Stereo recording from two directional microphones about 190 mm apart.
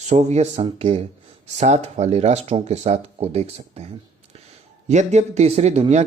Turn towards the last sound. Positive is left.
turn(degrees=-35)  # may be behind; listen again after turning